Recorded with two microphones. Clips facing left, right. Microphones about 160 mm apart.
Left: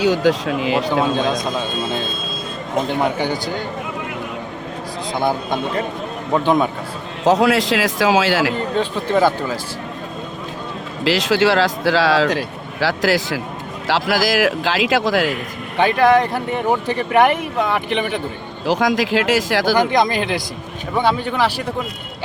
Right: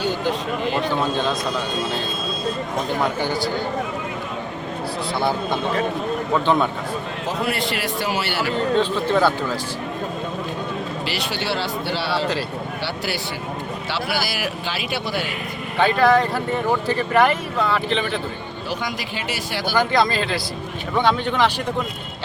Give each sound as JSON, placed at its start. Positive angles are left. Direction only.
{"t": 0.0, "sound": "speech", "side_deg": 90}
{"t": 1.1, "sound": "a man's voice", "side_deg": 15}
{"t": 6.3, "sound": "speech", "side_deg": 10}
{"t": 7.3, "sound": "speech", "side_deg": 90}
{"t": 8.8, "sound": "speech", "side_deg": 10}
{"t": 11.0, "sound": "speech", "side_deg": 90}
{"t": 15.8, "sound": "speech", "side_deg": 15}
{"t": 18.7, "sound": "speech", "side_deg": 90}
{"t": 19.7, "sound": "speech", "side_deg": 15}